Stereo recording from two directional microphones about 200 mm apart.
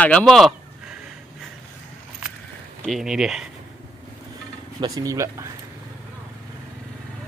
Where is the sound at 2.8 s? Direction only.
Centre (ahead or behind).